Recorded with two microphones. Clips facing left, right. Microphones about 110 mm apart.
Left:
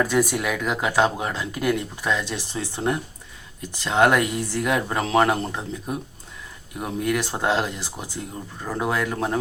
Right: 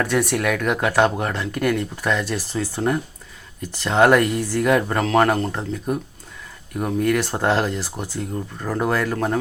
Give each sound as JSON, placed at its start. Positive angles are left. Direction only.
{"t": 0.0, "sound": "speech", "side_deg": 5}